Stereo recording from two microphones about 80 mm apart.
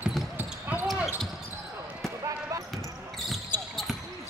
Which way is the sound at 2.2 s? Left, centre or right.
Right.